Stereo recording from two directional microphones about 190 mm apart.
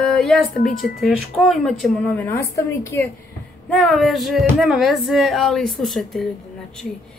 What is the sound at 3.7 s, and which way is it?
A woman's voice, centre (ahead or behind).